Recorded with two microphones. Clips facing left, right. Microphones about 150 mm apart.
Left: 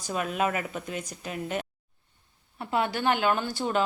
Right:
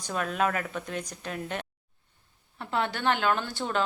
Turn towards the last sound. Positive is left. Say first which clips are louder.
# left 2 dB
turn(degrees=10)  # may be behind; listen again after turning